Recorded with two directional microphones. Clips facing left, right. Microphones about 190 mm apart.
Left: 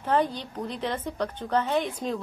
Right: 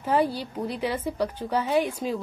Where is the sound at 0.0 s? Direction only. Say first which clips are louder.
Right 1 dB; 10° right (ahead or behind).